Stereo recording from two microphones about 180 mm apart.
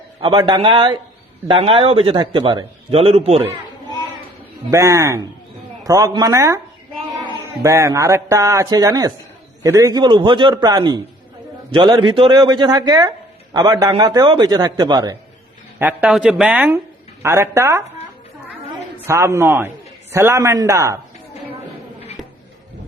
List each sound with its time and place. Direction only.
0.2 s a man's voice: 25° right (ahead or behind)
4.7 s speech: 15° right (ahead or behind)
15.8 s speech: 5° right (ahead or behind)
19.0 s speech: 15° right (ahead or behind)